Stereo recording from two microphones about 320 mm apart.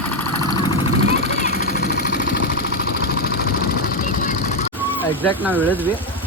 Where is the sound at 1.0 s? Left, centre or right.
Left.